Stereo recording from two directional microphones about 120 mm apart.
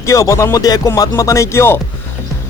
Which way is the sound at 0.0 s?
25° left (ahead or behind).